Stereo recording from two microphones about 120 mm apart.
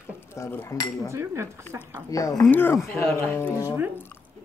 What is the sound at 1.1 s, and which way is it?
Speech, 20° right (ahead or behind).